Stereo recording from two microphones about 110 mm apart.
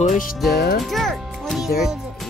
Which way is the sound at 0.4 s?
Centre (ahead or behind).